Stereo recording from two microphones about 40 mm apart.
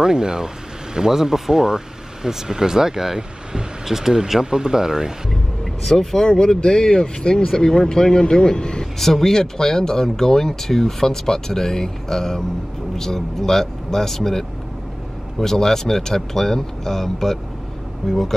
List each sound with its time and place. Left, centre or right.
0.0 s speech: centre
5.9 s speech: centre
8.9 s speech: centre